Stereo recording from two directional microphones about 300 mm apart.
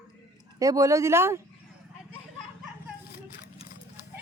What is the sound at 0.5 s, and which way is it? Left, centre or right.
Speech, centre.